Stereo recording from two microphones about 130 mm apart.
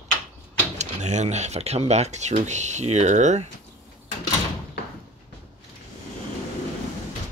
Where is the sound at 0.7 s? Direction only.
65° right (ahead or behind).